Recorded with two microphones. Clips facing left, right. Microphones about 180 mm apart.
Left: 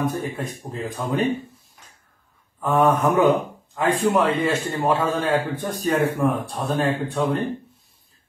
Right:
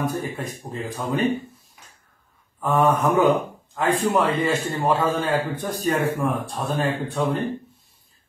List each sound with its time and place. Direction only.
0.0 s speech: centre (ahead or behind)
2.6 s speech: centre (ahead or behind)